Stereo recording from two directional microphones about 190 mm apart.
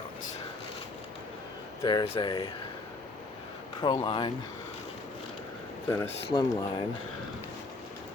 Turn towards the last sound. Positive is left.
turn(degrees=15)  # may be behind; listen again after turning